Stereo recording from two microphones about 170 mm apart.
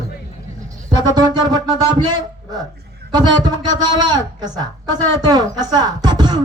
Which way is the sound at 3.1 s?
25° right (ahead or behind).